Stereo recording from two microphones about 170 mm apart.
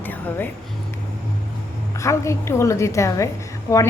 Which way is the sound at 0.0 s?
10° left (ahead or behind).